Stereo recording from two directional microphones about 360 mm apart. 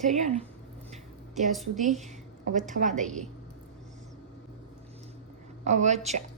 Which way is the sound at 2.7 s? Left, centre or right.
Centre.